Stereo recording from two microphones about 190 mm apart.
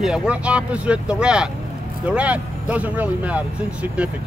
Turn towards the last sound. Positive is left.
turn(degrees=-5)  # may be behind; listen again after turning